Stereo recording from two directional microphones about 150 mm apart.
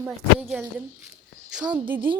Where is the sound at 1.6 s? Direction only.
30° right (ahead or behind).